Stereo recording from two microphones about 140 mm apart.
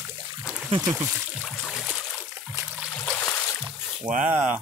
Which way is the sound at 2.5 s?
15° right (ahead or behind).